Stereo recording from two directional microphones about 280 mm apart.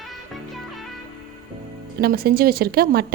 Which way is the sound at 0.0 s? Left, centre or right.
Centre.